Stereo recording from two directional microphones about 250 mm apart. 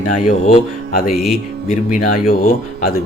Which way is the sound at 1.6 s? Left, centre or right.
Left.